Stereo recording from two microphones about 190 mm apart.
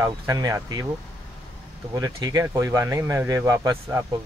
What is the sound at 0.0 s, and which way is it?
Speech, 15° right (ahead or behind).